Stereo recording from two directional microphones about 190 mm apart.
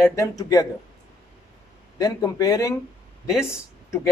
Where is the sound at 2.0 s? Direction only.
20° left (ahead or behind).